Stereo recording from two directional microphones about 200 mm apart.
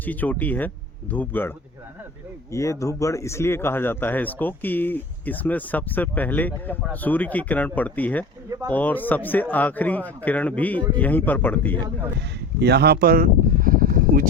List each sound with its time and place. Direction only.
0.0 s speech: 10° left (ahead or behind)
12.5 s speech: 55° right (ahead or behind)